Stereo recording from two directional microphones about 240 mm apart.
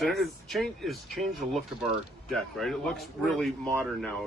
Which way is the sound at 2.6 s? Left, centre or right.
Centre.